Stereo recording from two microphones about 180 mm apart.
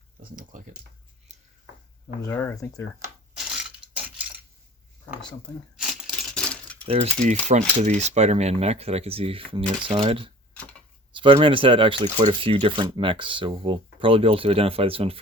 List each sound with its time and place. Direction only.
0.2 s speech: 50° right (ahead or behind)
2.2 s speech: 15° left (ahead or behind)
5.7 s coin: centre (ahead or behind)
6.8 s speech: 35° right (ahead or behind)
10.5 s a sound: 5° left (ahead or behind)
11.1 s speech: 30° right (ahead or behind)